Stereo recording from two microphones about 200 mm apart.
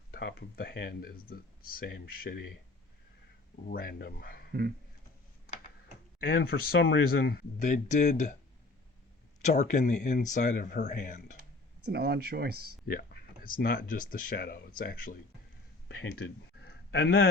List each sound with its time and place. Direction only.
0.1 s speech: 55° left (ahead or behind)
3.7 s speech: 50° left (ahead or behind)
6.1 s speech: 50° left (ahead or behind)
9.4 s speech: 35° left (ahead or behind)
11.9 s speech: 50° right (ahead or behind)
12.8 s speech: 50° left (ahead or behind)
16.0 s speech: 70° left (ahead or behind)
16.9 s a man's voice: 55° left (ahead or behind)